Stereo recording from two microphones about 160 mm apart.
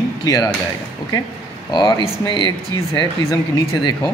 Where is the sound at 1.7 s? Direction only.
25° left (ahead or behind).